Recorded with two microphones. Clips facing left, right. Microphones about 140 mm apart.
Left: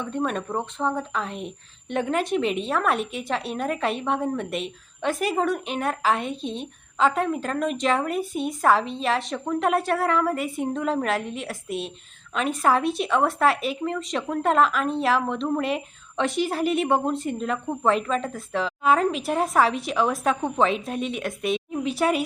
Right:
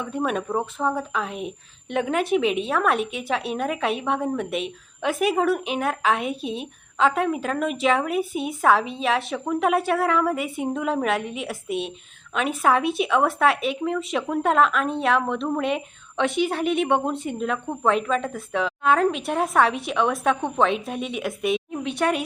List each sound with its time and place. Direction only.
0.0 s speech: 5° right (ahead or behind)